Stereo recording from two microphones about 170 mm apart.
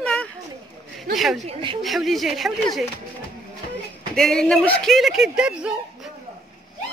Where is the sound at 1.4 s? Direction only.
30° right (ahead or behind).